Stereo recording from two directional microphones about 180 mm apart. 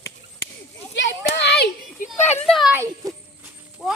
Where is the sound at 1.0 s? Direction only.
70° left (ahead or behind).